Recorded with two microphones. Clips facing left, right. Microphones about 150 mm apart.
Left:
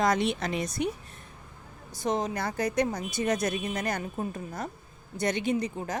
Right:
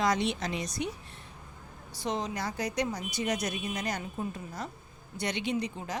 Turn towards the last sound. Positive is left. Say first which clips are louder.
# left 4 dB
turn(degrees=45)  # may be behind; listen again after turning